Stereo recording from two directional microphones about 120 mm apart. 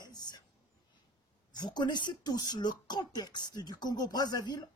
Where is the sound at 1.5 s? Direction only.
35° left (ahead or behind).